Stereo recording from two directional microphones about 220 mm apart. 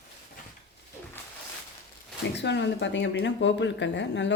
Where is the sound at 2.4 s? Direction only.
50° left (ahead or behind).